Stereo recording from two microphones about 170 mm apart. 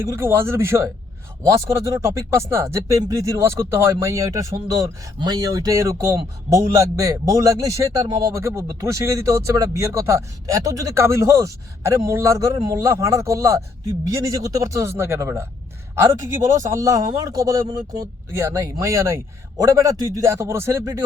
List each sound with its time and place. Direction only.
0.1 s speech: 15° right (ahead or behind)
16.6 s speech: 20° right (ahead or behind)